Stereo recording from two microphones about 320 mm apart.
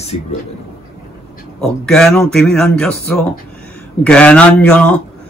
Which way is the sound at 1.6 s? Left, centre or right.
Centre.